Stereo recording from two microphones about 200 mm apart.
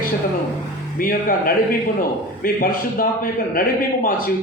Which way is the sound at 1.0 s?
45° left (ahead or behind).